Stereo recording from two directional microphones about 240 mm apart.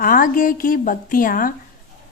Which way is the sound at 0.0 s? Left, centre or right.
Left.